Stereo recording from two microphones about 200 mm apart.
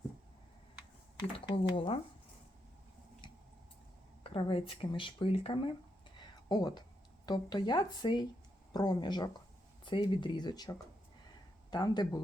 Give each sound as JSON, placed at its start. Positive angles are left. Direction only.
{"t": 1.5, "sound": "speech", "side_deg": 25}
{"t": 4.2, "sound": "speech", "side_deg": 25}